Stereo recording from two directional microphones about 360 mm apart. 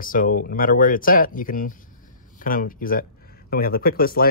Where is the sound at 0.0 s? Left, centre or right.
Left.